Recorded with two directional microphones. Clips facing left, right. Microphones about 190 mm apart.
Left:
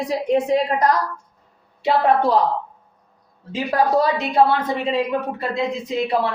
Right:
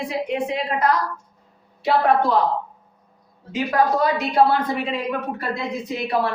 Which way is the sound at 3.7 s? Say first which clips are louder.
Left 2 dB; 30° left (ahead or behind).